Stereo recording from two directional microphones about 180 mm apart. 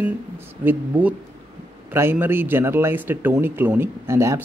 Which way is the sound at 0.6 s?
10° right (ahead or behind).